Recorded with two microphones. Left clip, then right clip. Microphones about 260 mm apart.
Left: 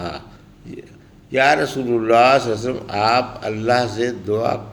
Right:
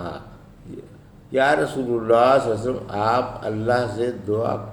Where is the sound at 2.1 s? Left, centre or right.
Left.